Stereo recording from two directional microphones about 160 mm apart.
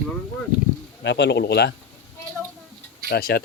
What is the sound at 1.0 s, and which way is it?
Speech, 90° left.